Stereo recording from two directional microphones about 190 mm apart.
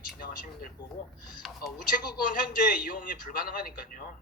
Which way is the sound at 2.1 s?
45° left (ahead or behind).